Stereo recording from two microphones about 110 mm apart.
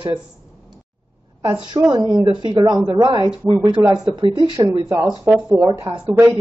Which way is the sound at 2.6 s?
30° right (ahead or behind).